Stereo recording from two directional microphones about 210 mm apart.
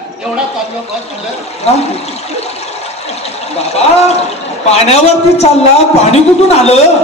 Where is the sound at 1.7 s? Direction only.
30° left (ahead or behind).